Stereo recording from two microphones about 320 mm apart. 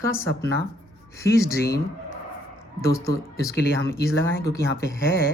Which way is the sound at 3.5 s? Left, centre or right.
Left.